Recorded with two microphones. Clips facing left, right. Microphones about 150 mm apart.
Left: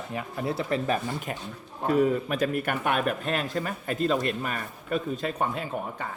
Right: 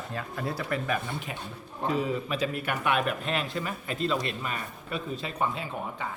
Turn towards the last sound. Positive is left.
turn(degrees=50)  # may be behind; listen again after turning